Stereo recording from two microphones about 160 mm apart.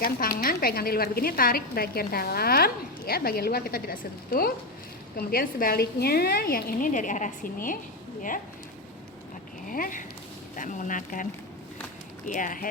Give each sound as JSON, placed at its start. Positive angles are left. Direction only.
{"t": 0.0, "sound": "a woman's voice", "side_deg": 65}
{"t": 9.6, "sound": "a woman's voice", "side_deg": 60}